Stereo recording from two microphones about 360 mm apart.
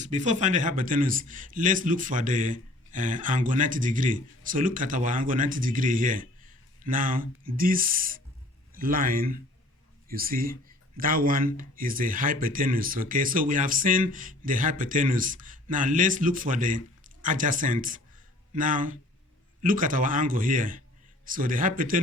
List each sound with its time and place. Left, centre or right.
0.0 s a man's voice: centre